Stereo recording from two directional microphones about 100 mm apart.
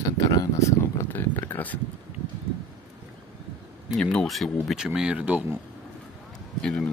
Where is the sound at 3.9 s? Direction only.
5° left (ahead or behind); by 5.4 s 10° right (ahead or behind).